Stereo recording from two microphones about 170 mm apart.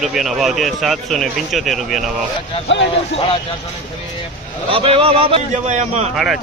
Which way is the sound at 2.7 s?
90° left.